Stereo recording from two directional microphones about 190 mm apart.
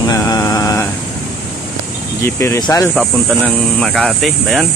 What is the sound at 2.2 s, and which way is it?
Speech, 15° left (ahead or behind).